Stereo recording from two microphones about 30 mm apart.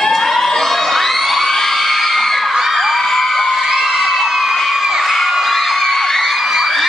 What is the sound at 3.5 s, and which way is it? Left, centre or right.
Crowd, centre.